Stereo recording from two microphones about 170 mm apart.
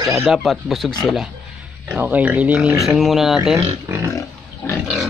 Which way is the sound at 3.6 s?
15° right (ahead or behind).